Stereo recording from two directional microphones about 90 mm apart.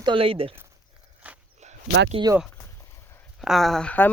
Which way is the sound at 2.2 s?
70° right (ahead or behind).